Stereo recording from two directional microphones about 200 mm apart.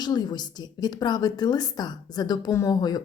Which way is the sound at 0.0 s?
20° left (ahead or behind).